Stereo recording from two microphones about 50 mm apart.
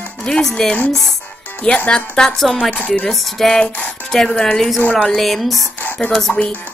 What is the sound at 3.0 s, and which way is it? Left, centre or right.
Speech, centre.